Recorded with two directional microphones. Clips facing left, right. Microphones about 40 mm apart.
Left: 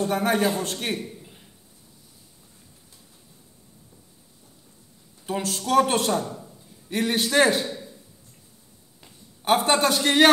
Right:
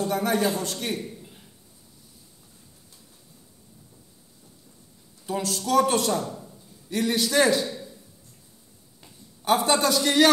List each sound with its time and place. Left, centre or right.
0.1 s speech: left
5.2 s speech: left
9.4 s speech: left